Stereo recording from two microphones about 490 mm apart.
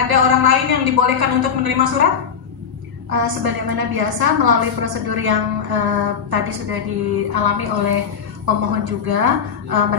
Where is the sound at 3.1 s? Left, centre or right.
Right.